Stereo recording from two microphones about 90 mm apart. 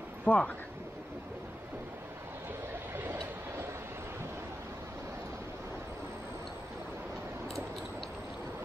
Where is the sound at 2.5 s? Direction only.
20° right (ahead or behind).